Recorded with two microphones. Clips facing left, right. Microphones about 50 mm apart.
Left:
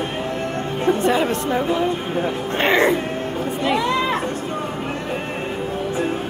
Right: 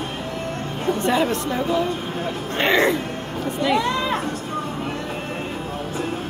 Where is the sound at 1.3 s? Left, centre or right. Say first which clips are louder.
Left 2 dB; left.